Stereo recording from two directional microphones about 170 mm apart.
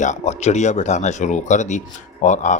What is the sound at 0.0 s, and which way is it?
Speech, 45° left (ahead or behind).